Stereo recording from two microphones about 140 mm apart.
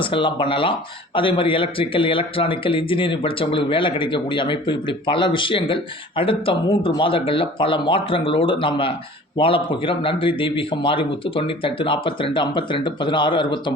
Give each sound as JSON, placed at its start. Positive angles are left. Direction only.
{"t": 0.0, "sound": "speech", "side_deg": 35}